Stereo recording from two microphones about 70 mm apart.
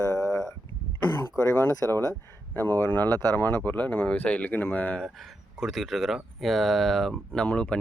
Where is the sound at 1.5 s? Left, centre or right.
Left.